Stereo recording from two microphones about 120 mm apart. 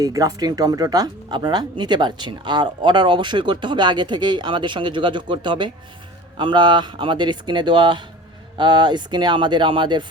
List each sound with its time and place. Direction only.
0.0 s speech: 30° right (ahead or behind)